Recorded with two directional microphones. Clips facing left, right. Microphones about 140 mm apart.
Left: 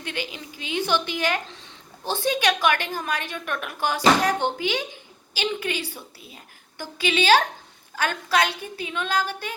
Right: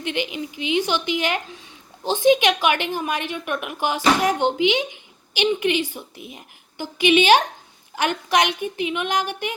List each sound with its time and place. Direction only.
0.0 s a woman's voice: 20° right (ahead or behind)